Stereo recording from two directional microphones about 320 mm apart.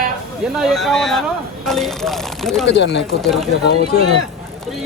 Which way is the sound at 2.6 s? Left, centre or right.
Left.